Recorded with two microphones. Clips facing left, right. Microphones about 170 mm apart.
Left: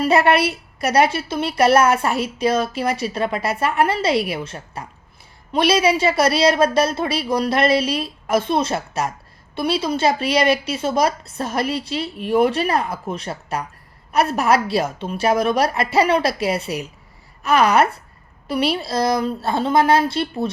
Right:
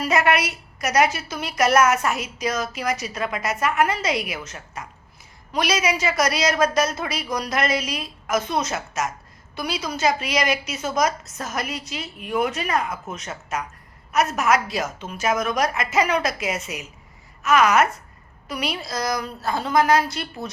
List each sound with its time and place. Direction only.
0.0 s a woman's voice: 30° left (ahead or behind)